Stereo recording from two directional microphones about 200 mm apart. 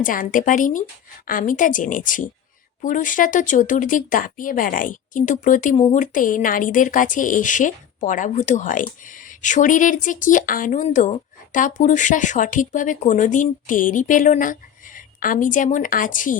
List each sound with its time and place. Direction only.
0.0 s a woman's voice: 40° left (ahead or behind)